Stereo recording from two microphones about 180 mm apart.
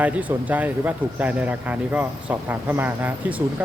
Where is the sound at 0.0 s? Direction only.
10° right (ahead or behind).